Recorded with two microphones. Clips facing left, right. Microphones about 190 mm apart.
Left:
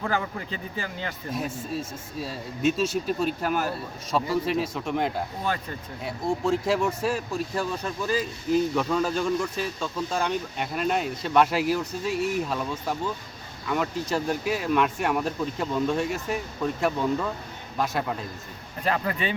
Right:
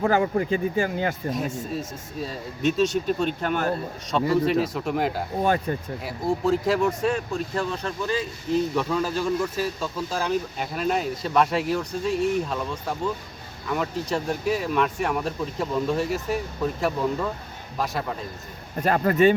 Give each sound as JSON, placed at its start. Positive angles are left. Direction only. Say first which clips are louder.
{"t": 0.0, "sound": "speech", "louder": "right 8 dB", "side_deg": -45}
{"t": 1.3, "sound": "speech", "louder": "right 2 dB", "side_deg": 0}
{"t": 18.8, "sound": "speech", "louder": "right 8 dB", "side_deg": -45}